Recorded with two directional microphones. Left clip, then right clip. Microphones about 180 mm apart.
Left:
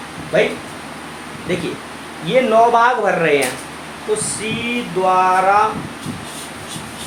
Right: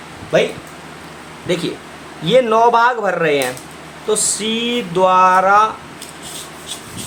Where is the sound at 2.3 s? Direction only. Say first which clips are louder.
Right 1 dB; 30° right (ahead or behind).